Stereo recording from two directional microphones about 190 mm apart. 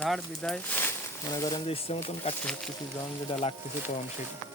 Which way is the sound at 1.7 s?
30° left (ahead or behind).